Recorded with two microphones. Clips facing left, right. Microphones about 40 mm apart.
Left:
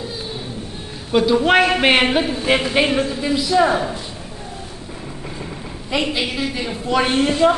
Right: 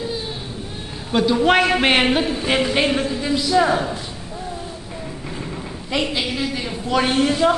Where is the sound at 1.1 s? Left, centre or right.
Centre.